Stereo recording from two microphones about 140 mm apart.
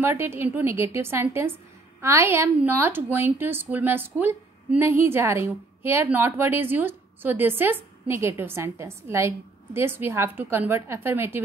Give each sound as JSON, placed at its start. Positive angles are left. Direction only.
{"t": 0.0, "sound": "a woman's voice", "side_deg": -15}